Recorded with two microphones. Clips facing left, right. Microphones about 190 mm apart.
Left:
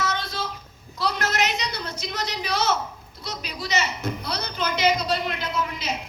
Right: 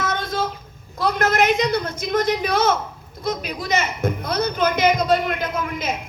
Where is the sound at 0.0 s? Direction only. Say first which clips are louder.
Right 5 dB; 50° right (ahead or behind).